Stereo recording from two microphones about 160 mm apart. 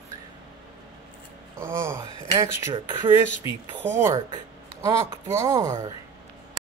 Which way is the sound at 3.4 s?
20° right (ahead or behind).